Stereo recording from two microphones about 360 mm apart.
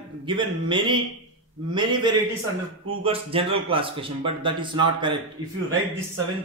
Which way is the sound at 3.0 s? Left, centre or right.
Centre.